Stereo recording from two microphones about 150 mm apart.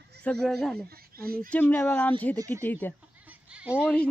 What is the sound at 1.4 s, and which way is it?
Speech, 10° left (ahead or behind).